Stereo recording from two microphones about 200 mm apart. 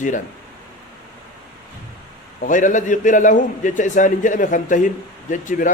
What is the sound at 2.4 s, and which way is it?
A man's voice, 40° left (ahead or behind).